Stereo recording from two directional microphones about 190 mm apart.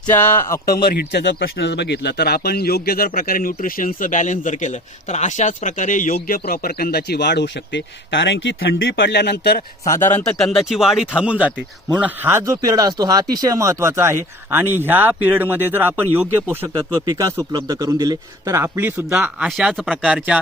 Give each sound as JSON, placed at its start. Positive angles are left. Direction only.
{"t": 0.1, "sound": "speech", "side_deg": 10}
{"t": 0.6, "sound": "speech", "side_deg": 55}
{"t": 10.1, "sound": "speech", "side_deg": 10}